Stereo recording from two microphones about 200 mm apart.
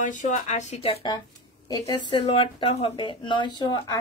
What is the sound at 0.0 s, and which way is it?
Speech, 40° left (ahead or behind).